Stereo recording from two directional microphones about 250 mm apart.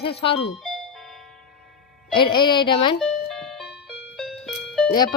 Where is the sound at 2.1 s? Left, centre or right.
Centre.